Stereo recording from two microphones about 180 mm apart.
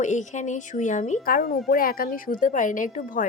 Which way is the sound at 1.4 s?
55° left (ahead or behind).